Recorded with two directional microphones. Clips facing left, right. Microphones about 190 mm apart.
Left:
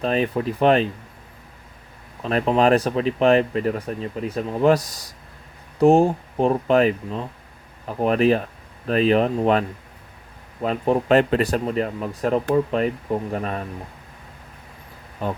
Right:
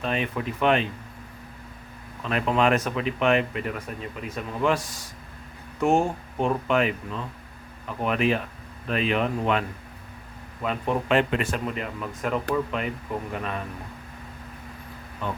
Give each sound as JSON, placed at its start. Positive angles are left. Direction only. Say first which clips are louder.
{"t": 0.0, "sound": "speech", "louder": "left 6 dB", "side_deg": 35}
{"t": 2.2, "sound": "speech", "louder": "left 5 dB", "side_deg": 30}
{"t": 15.2, "sound": "speech", "louder": "left 5 dB", "side_deg": 40}